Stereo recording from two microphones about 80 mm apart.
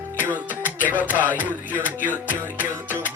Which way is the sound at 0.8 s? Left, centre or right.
Right.